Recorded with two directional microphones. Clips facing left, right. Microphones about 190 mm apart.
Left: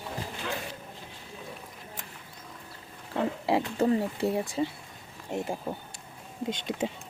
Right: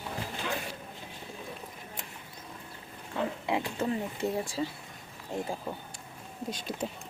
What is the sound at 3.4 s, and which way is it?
Speech, 35° left (ahead or behind).